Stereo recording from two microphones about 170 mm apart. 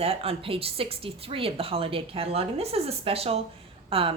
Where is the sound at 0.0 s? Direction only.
35° right (ahead or behind).